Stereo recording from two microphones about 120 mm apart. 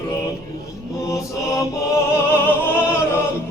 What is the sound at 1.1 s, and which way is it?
Mantra, 25° left (ahead or behind).